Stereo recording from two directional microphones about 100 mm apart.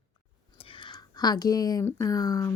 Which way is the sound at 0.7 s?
50° left (ahead or behind).